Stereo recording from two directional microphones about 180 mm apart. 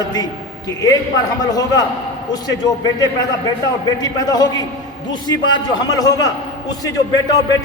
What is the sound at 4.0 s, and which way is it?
A man's voice, 20° left (ahead or behind).